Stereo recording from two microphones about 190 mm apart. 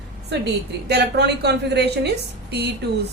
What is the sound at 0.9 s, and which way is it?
A woman's voice, 60° right (ahead or behind).